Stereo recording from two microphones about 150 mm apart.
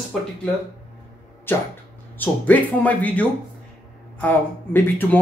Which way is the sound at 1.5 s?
15° left (ahead or behind).